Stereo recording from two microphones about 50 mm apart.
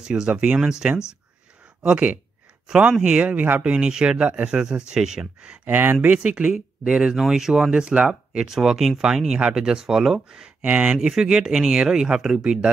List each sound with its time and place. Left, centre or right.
0.0 s speech: centre
3.0 s speech: centre
3.3 s speech: right
3.6 s speech: centre
5.7 s speech: right
6.0 s speech: right
7.2 s speech: centre
8.5 s speech: centre
10.6 s speech: right
11.1 s speech: centre